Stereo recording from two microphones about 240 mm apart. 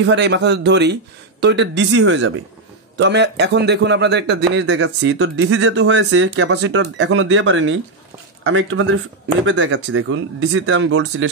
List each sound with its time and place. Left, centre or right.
0.0 s a man's voice: right